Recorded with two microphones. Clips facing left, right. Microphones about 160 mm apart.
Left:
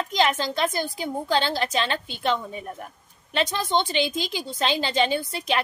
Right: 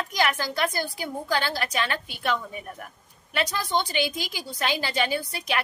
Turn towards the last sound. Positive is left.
turn(degrees=25)  # may be behind; listen again after turning